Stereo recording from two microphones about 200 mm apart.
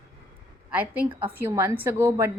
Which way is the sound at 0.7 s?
10° right (ahead or behind).